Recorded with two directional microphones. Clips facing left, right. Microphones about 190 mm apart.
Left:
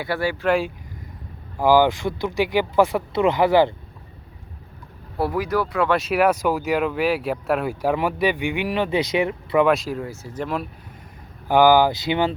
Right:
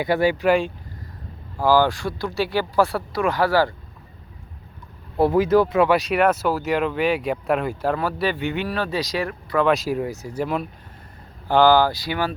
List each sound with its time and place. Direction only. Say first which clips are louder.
0.0 s speech: right 5 dB; 20° right (ahead or behind)
0.4 s speech: left 1 dB; centre (ahead or behind)
1.5 s speech: left 2 dB; 15° left (ahead or behind)
5.1 s speech: right 6 dB; 25° right (ahead or behind)
5.9 s speech: even; centre (ahead or behind); by 9.6 s 20° left (ahead or behind)
9.6 s speech: even; centre (ahead or behind)
9.9 s speech: right 4 dB; 15° right (ahead or behind)
10.4 s speech: right 2 dB; centre (ahead or behind)
11.4 s speech: left 1 dB; 15° left (ahead or behind)